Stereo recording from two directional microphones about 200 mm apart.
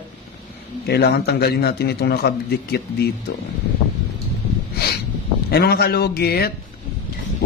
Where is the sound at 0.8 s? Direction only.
55° left (ahead or behind).